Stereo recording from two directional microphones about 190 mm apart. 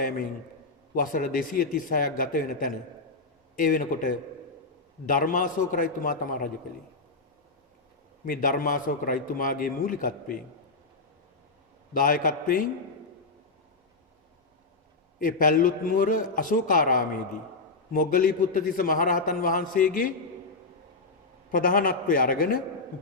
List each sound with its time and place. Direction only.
0.9 s a man's voice: 45° left (ahead or behind)
8.2 s a man's voice: 45° left (ahead or behind)
11.9 s a man's voice: 45° left (ahead or behind)
15.2 s a man's voice: 45° left (ahead or behind)
21.5 s a man's voice: 50° left (ahead or behind)